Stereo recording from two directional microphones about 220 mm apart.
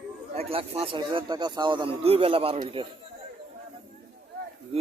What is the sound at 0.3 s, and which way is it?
Speech, 25° right (ahead or behind).